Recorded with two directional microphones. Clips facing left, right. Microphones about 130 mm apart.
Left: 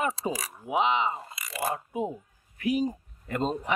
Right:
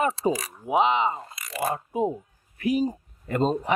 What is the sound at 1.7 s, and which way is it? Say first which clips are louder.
Speech: right 5 dB; 35° right (ahead or behind).